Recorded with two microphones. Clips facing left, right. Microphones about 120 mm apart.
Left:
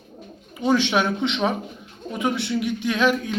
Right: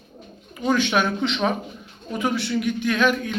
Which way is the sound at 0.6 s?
25° left (ahead or behind).